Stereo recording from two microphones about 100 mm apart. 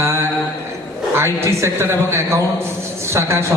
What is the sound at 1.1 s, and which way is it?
A man's voice, 25° right (ahead or behind).